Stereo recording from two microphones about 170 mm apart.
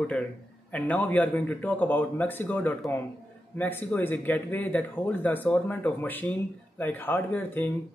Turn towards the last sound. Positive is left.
turn(degrees=10)  # may be behind; listen again after turning